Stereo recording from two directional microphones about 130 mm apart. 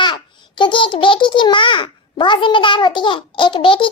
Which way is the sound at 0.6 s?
40° left (ahead or behind).